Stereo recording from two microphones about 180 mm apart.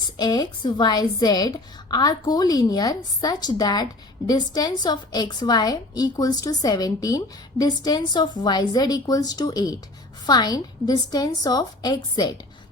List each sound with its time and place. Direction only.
0.2 s a woman's voice: 20° left (ahead or behind)